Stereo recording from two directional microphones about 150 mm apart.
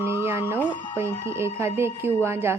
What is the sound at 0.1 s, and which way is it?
Music, 15° right (ahead or behind).